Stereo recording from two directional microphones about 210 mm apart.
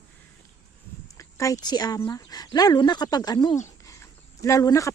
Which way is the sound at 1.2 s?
15° left (ahead or behind).